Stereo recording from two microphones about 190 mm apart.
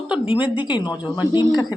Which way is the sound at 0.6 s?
25° left (ahead or behind).